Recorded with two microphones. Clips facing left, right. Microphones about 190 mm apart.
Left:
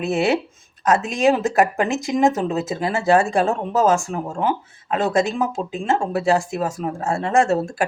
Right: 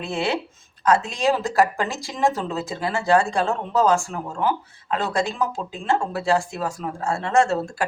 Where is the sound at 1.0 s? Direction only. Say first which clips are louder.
Left 4 dB; 20° left (ahead or behind).